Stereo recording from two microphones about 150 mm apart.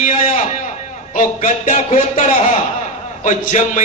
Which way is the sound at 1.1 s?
55° left (ahead or behind).